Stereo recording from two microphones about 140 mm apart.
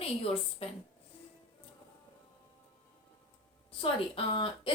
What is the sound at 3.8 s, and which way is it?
Speech, 40° left (ahead or behind).